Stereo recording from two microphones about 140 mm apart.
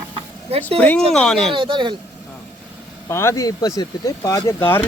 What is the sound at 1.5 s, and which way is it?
Speech, 35° right (ahead or behind).